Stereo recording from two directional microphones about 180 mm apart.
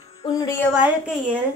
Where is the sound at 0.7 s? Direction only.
5° right (ahead or behind).